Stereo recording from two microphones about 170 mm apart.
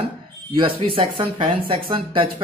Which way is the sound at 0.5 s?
30° right (ahead or behind).